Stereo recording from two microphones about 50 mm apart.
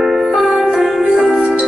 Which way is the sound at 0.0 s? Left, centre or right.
Centre.